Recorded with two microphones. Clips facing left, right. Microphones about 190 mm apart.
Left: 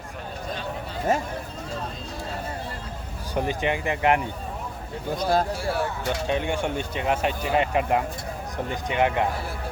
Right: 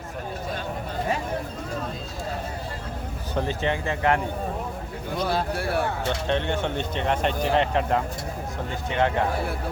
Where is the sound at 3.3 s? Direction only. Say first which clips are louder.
Left 1 dB; 15° left (ahead or behind).